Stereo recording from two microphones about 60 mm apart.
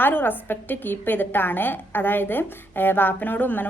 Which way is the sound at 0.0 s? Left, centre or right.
Left.